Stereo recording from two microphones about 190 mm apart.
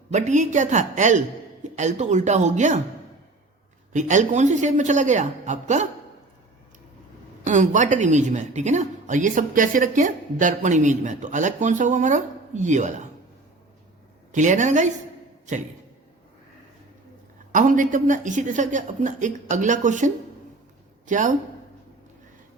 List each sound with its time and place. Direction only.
0.1 s a woman's voice: 40° right (ahead or behind)
3.9 s a woman's voice: 40° right (ahead or behind)
7.4 s a woman's voice: 40° right (ahead or behind)
14.3 s a woman's voice: 40° right (ahead or behind)
17.5 s a woman's voice: 45° right (ahead or behind)
21.1 s a woman's voice: 40° right (ahead or behind)